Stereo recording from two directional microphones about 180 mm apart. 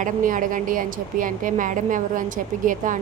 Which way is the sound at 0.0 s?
45° right (ahead or behind).